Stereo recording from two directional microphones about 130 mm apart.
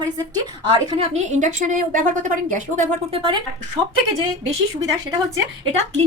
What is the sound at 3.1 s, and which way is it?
Speech, 40° right (ahead or behind).